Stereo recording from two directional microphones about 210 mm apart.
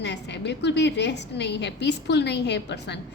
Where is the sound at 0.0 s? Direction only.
55° left (ahead or behind).